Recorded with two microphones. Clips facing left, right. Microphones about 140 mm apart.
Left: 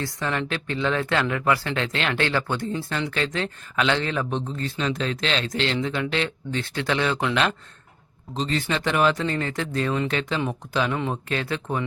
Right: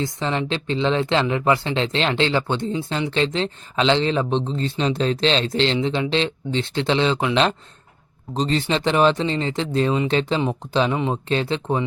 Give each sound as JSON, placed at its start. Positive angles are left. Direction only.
{"t": 0.0, "sound": "speech", "side_deg": -20}
{"t": 8.3, "sound": "speech", "side_deg": -35}